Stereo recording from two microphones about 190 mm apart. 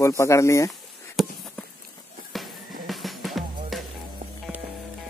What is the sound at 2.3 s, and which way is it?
Music, centre (ahead or behind).